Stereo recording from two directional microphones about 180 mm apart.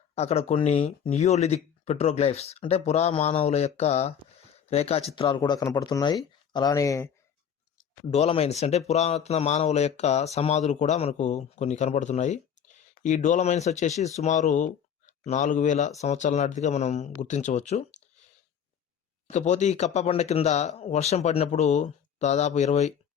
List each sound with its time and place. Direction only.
0.1 s speech: 35° left (ahead or behind); by 7.1 s 20° left (ahead or behind)
8.1 s speech: 35° left (ahead or behind)
19.3 s speech: 40° left (ahead or behind)